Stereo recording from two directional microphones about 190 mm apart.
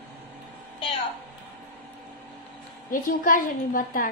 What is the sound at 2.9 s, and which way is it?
A woman's voice, 45° left (ahead or behind).